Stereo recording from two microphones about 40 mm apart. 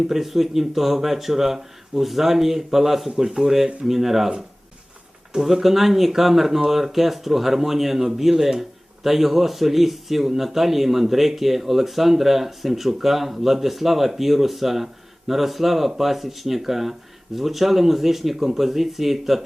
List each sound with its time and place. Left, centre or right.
0.1 s speech: centre
5.4 s speech: centre